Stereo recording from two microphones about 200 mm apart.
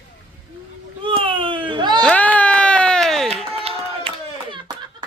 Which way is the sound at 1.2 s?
25° right (ahead or behind).